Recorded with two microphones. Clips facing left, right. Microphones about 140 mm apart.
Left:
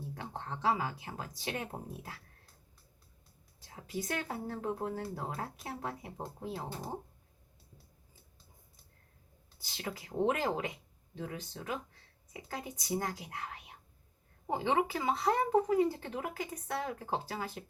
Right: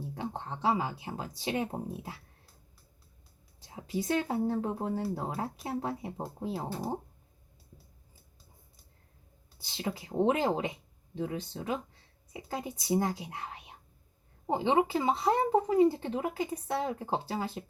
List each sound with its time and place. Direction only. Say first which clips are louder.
0.1 s speech: right 5 dB; 20° right (ahead or behind)
3.7 s speech: right 7 dB; 20° right (ahead or behind)
9.7 s speech: right 5 dB; 25° right (ahead or behind)